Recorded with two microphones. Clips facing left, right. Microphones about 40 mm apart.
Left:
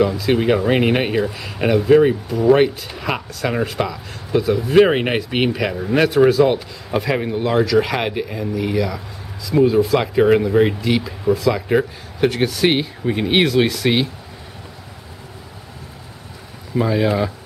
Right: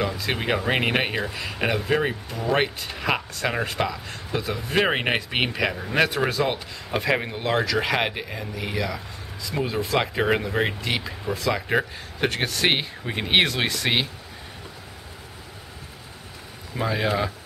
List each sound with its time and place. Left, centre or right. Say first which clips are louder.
0.0 s speech: left 9 dB; centre
16.7 s speech: left 6 dB; centre